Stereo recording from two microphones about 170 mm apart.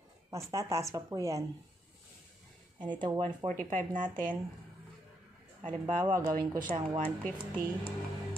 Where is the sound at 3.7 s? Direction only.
50° right (ahead or behind).